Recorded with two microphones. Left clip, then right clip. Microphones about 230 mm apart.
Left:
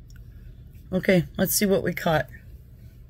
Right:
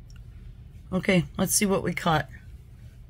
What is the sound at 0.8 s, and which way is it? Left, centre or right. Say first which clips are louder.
A woman's voice: left 3 dB; centre.